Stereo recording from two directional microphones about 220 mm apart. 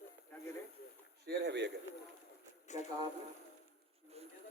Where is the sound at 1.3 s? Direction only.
50° right (ahead or behind).